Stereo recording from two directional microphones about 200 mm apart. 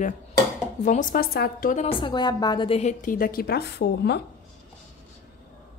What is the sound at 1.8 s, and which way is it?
A woman's voice, 20° left (ahead or behind).